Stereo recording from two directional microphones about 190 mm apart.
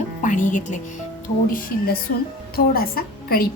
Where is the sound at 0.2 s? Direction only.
40° left (ahead or behind).